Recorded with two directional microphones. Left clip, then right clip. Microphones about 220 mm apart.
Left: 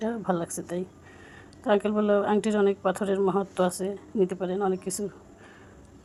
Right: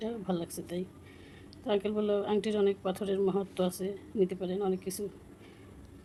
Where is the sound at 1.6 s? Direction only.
15° left (ahead or behind).